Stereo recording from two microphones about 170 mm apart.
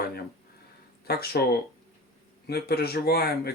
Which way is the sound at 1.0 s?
65° left (ahead or behind).